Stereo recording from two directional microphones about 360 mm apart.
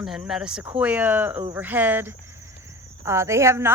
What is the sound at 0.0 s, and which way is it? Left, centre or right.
A woman's voice, centre.